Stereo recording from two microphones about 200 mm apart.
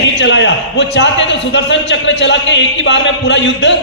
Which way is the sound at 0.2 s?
60° left (ahead or behind).